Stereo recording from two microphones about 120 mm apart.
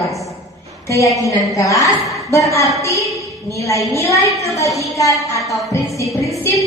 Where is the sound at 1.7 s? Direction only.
Centre (ahead or behind).